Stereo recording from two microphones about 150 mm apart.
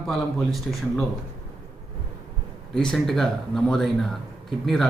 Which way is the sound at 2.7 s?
5° left (ahead or behind).